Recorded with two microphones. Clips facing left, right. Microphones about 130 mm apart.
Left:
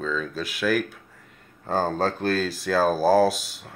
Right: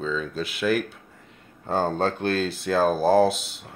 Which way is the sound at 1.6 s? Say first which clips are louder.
Even; centre (ahead or behind).